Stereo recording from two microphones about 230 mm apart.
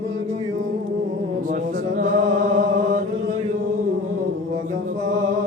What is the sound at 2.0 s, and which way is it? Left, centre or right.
Music, right.